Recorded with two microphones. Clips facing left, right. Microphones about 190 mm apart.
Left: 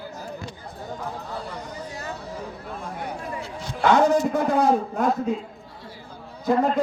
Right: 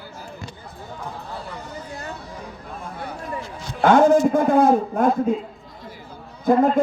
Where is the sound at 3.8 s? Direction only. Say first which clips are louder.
Right 4 dB; 50° right (ahead or behind).